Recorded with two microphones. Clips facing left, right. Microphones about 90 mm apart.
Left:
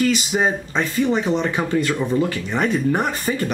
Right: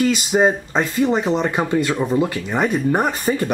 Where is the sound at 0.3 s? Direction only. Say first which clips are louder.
Right 4 dB; 10° right (ahead or behind).